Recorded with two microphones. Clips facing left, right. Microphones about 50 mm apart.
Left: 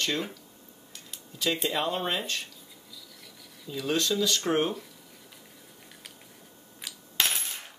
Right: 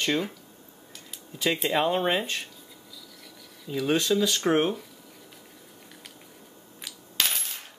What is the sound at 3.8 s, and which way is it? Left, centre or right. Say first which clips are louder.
Speech: right 3 dB; centre.